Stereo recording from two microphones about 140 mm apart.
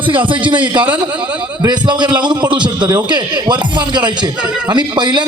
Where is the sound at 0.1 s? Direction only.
35° right (ahead or behind).